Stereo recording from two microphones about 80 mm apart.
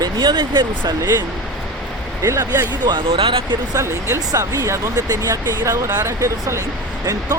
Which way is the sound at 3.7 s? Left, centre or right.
Right.